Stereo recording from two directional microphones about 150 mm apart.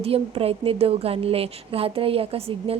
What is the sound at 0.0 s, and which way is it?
A woman's voice, 40° right (ahead or behind).